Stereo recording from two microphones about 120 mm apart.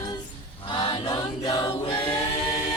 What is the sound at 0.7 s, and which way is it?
Chant, 40° left (ahead or behind).